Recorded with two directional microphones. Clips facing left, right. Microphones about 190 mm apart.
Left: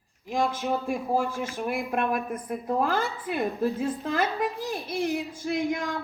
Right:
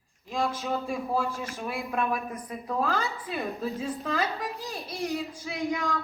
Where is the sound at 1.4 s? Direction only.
55° left (ahead or behind).